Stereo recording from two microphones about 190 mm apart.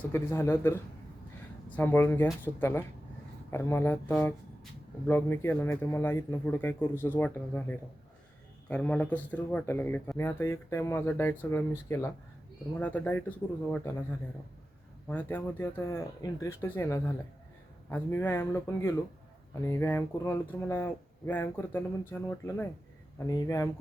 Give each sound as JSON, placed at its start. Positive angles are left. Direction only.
{"t": 0.1, "sound": "a man's voice", "side_deg": 15}
{"t": 15.0, "sound": "speech", "side_deg": 10}